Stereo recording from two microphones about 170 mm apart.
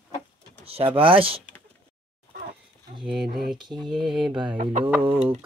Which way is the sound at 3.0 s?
5° right (ahead or behind).